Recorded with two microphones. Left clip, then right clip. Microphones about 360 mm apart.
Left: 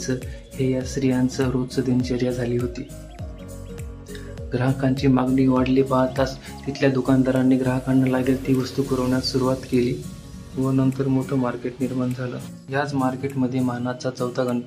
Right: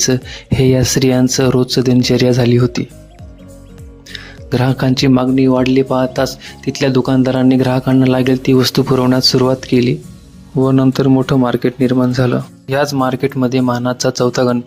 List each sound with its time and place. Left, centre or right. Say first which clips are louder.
0.6 s speech: right 11 dB; right
4.1 s speech: right 9 dB; right